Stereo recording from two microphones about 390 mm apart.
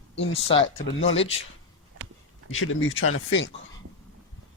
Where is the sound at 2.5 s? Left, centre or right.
Left.